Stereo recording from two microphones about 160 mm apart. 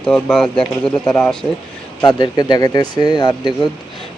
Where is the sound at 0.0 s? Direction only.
5° left (ahead or behind).